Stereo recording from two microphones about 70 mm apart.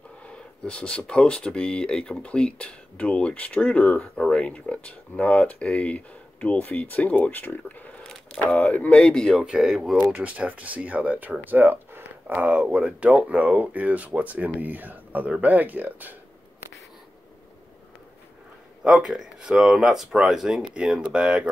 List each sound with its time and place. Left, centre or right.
0.2 s speech: centre
8.9 s speech: centre
9.3 s speech: centre
9.9 s speech: right
18.9 s speech: centre